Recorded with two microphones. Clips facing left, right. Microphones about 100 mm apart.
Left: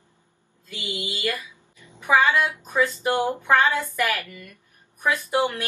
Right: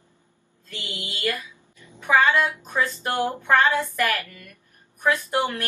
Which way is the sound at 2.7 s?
15° left (ahead or behind).